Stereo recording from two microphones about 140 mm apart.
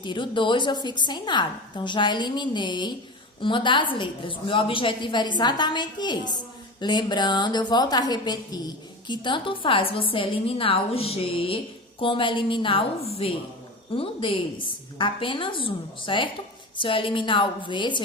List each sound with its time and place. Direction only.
0.0 s a woman's voice: 35° left (ahead or behind)